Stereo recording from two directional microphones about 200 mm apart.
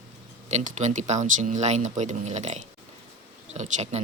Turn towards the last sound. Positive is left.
turn(degrees=-35)  # may be behind; listen again after turning